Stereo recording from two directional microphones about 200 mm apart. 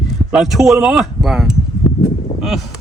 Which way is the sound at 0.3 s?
Centre (ahead or behind).